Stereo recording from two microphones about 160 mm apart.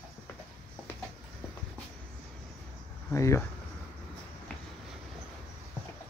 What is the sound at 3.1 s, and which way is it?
Speech, 20° left (ahead or behind).